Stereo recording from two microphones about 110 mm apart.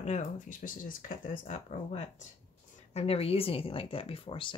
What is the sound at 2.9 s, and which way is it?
Speech, 65° left (ahead or behind).